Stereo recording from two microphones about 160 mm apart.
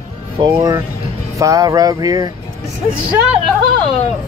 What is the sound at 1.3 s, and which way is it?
Speech, 20° right (ahead or behind).